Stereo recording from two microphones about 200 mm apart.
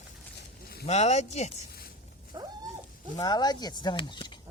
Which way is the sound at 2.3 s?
20° right (ahead or behind).